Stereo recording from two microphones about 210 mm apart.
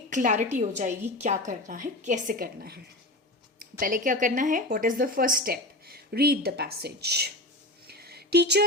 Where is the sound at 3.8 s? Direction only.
40° right (ahead or behind).